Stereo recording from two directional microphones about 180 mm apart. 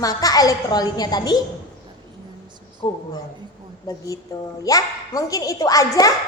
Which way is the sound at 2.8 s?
25° left (ahead or behind).